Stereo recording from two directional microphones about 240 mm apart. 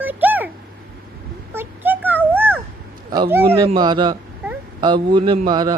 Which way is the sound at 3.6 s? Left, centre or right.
Centre.